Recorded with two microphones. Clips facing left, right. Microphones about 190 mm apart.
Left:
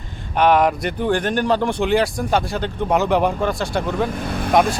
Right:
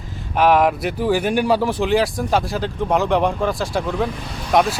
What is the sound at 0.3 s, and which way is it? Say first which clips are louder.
Speech: even; centre (ahead or behind).